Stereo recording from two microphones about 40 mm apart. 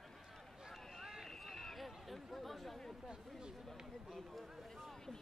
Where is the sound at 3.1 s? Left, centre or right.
Centre.